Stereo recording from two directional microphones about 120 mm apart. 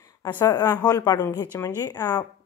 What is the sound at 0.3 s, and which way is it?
Speech, 20° left (ahead or behind).